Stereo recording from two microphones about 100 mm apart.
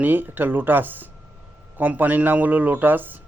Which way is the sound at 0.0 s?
20° right (ahead or behind).